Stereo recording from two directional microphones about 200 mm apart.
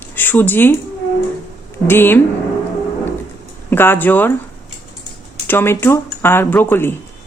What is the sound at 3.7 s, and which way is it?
Speech, 10° left (ahead or behind).